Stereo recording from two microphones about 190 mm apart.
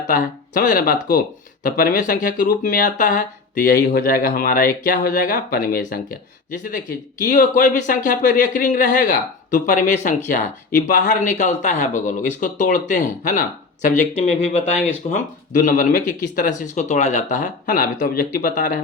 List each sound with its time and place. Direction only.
0.1 s speech: 45° left (ahead or behind)
7.2 s speech: 45° left (ahead or behind)